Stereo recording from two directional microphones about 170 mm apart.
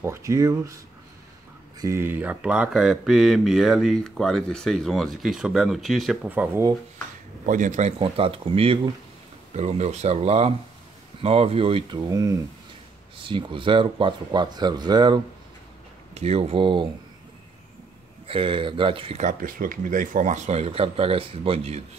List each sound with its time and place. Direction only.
0.0 s speech: 15° right (ahead or behind)
1.8 s speech: 15° right (ahead or behind)
7.4 s speech: 50° right (ahead or behind)
12.1 s speech: 20° right (ahead or behind)
16.2 s speech: 35° right (ahead or behind)
18.2 s speech: 30° right (ahead or behind)
19.2 s speech: 55° right (ahead or behind); by 21.8 s 35° right (ahead or behind)